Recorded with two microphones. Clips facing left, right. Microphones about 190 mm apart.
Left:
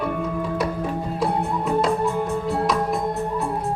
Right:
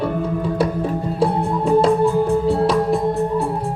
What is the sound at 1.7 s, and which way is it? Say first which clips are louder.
Music: right 7 dB; 30° right (ahead or behind).